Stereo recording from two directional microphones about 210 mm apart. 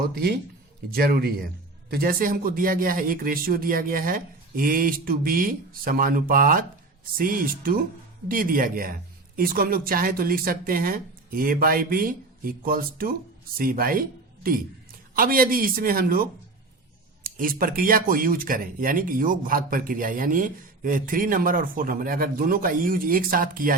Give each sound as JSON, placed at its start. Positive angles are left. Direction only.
{"t": 0.1, "sound": "speech", "side_deg": -50}